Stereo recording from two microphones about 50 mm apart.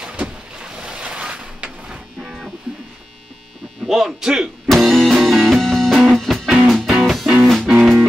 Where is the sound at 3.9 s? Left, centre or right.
Centre.